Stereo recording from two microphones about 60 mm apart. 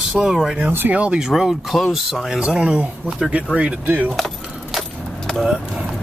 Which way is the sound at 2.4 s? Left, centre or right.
Centre.